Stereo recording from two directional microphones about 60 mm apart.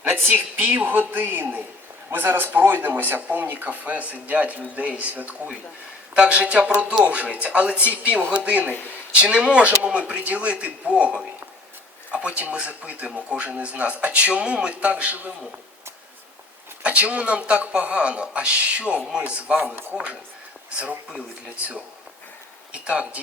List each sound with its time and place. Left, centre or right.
0.0 s speech: right
16.8 s speech: right
19.6 s speech: right
21.5 s speech: right